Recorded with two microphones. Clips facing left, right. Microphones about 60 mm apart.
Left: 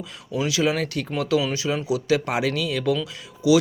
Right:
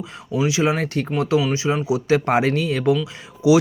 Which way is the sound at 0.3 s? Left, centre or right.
Right.